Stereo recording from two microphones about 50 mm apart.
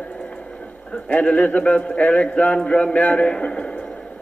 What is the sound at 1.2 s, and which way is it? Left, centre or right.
A man's voice, left.